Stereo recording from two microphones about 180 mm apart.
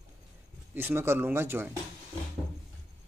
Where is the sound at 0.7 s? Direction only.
10° right (ahead or behind).